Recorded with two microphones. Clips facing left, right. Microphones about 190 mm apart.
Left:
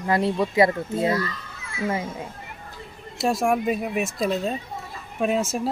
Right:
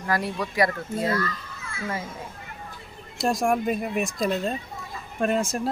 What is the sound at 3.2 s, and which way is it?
Speech, 5° left (ahead or behind).